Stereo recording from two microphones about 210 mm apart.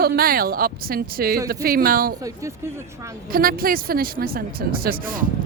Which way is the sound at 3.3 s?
45° right (ahead or behind).